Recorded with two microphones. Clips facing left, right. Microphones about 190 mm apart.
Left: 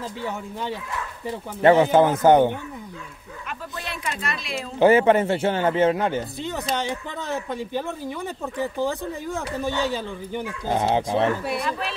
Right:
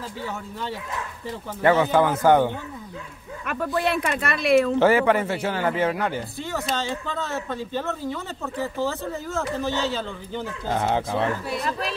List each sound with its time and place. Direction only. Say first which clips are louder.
0.2 s a man's voice: left 1 dB; 15° left (ahead or behind)
3.4 s speech: right 11 dB; 65° right (ahead or behind)
4.7 s a man's voice: left 2 dB; 20° left (ahead or behind)